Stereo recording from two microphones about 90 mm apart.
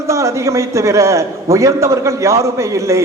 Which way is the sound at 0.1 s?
35° right (ahead or behind).